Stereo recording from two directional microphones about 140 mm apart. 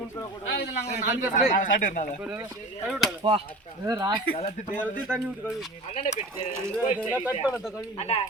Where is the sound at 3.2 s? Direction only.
40° right (ahead or behind).